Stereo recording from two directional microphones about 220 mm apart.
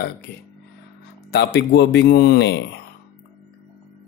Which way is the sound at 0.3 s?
50° left (ahead or behind).